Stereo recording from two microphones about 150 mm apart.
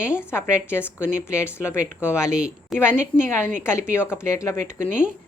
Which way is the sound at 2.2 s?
5° right (ahead or behind).